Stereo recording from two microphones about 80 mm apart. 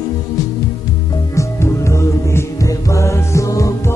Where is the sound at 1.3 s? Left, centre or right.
Left.